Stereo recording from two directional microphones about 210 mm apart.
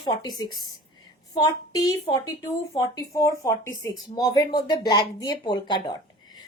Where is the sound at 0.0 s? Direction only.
20° left (ahead or behind).